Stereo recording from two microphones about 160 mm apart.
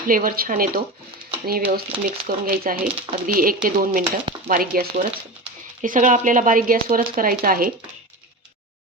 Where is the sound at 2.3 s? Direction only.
60° right (ahead or behind).